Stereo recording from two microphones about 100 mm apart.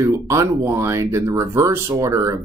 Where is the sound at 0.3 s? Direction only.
30° right (ahead or behind).